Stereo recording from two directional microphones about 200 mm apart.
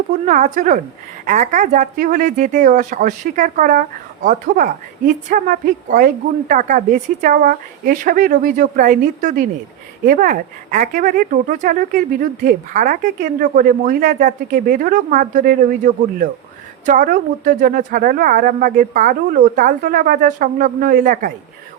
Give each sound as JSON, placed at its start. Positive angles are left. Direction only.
{"t": 0.3, "sound": "speech", "side_deg": -40}